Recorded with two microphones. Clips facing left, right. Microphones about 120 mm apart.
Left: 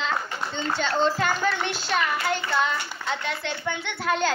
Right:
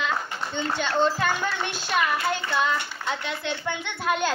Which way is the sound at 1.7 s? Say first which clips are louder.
Right 1 dB; 15° right (ahead or behind).